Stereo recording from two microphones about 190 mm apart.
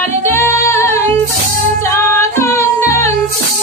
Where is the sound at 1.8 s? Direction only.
15° left (ahead or behind).